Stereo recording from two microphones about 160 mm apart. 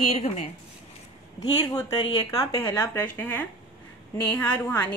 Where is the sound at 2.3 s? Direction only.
20° left (ahead or behind).